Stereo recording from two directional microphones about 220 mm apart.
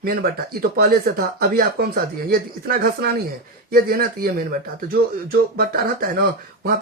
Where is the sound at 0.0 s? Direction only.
40° right (ahead or behind).